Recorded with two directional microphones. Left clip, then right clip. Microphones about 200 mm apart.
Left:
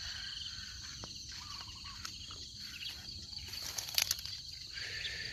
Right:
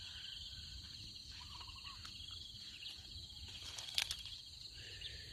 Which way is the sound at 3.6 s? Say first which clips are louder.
Left 5 dB; 50° left (ahead or behind).